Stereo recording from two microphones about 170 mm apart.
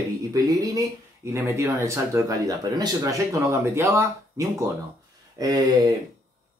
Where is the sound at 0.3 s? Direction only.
20° right (ahead or behind).